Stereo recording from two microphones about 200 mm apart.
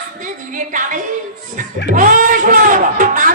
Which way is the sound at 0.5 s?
40° right (ahead or behind).